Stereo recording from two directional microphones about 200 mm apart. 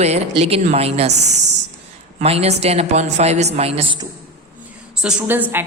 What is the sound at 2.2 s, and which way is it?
A woman's voice, 30° right (ahead or behind).